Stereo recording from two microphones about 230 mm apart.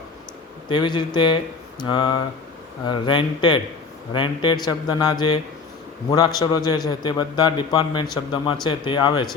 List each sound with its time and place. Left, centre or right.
0.7 s a man's voice: centre